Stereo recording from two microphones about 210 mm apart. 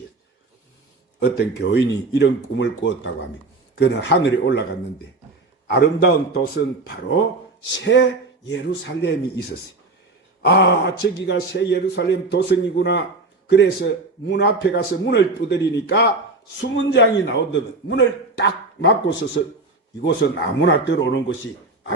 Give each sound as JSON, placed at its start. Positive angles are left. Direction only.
{"t": 1.2, "sound": "a man's voice", "side_deg": 55}
{"t": 5.6, "sound": "a man's voice", "side_deg": 55}
{"t": 7.7, "sound": "a man's voice", "side_deg": 60}
{"t": 10.4, "sound": "a man's voice", "side_deg": 55}